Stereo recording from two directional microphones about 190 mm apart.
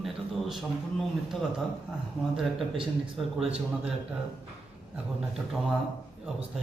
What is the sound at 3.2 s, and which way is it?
Speech, centre (ahead or behind).